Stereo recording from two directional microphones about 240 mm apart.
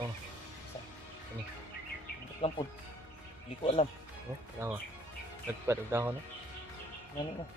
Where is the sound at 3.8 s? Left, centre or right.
Left.